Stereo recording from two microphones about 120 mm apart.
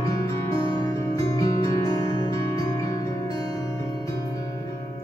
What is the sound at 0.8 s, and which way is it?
Music, 30° left (ahead or behind).